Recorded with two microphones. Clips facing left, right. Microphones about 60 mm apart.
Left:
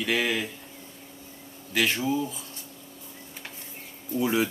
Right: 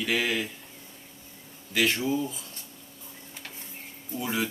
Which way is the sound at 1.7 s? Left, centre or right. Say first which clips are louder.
Even; centre.